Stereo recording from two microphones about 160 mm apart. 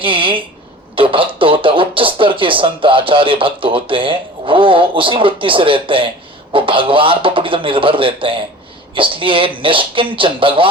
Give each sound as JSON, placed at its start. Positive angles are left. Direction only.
{"t": 0.0, "sound": "speech", "side_deg": -30}